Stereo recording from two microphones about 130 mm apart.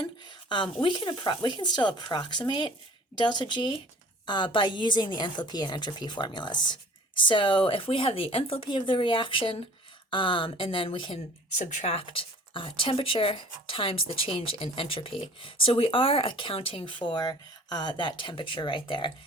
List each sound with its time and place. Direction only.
0.0 s speech: 35° left (ahead or behind)
11.5 s speech: 70° left (ahead or behind)
11.9 s speech: 45° left (ahead or behind)